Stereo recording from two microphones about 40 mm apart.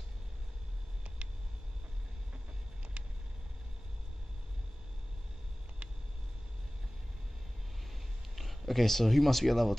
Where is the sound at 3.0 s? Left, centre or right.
Right.